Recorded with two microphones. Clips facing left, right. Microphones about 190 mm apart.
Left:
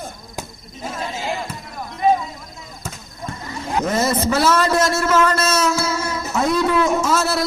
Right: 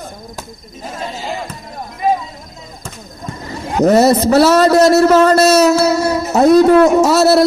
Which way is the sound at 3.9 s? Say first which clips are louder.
Right 9 dB; 35° right (ahead or behind).